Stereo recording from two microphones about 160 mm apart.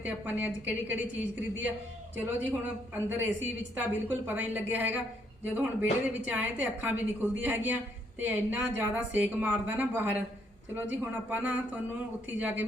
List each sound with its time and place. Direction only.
0.0 s a woman's voice: 10° right (ahead or behind)